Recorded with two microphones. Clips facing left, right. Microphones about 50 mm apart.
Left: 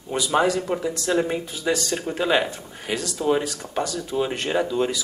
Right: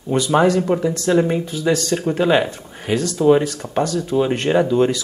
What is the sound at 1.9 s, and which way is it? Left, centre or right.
Speech, centre.